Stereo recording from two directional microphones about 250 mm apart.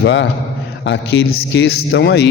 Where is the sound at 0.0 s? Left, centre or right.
Left.